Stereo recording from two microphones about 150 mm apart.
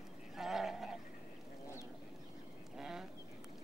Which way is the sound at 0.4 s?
Centre (ahead or behind).